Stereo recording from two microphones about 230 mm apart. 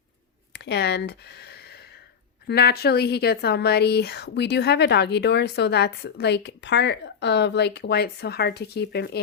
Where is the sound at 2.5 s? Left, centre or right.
Left.